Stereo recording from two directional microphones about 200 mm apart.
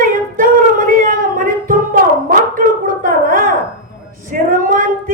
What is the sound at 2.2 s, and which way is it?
Gargling, 40° right (ahead or behind).